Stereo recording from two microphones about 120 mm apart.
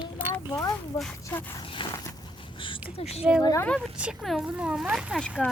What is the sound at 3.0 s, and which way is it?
Speech, 55° left (ahead or behind).